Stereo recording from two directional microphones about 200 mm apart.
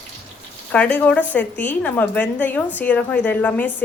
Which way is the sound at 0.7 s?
10° left (ahead or behind).